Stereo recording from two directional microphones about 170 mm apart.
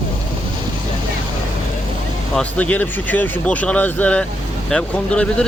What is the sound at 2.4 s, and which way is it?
Speech, 10° left (ahead or behind).